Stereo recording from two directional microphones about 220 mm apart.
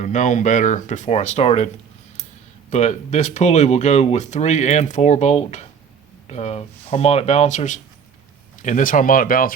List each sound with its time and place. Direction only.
0.0 s speech: 35° left (ahead or behind)